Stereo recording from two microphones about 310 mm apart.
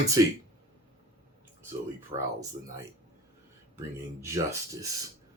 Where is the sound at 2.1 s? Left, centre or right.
Centre.